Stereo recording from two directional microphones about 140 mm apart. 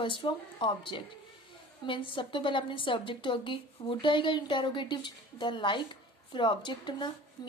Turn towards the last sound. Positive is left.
turn(degrees=35)  # may be behind; listen again after turning